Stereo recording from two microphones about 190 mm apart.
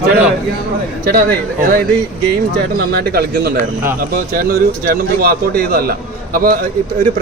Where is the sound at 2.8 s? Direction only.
55° right (ahead or behind).